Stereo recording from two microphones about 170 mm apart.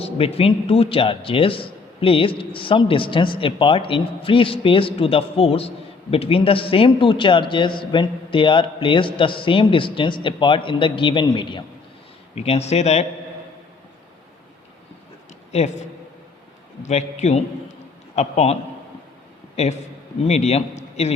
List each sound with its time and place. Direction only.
0.0 s a man's voice: 35° left (ahead or behind)
15.5 s a man's voice: 40° left (ahead or behind)
16.8 s a man's voice: 40° left (ahead or behind)
20.2 s a man's voice: 40° left (ahead or behind)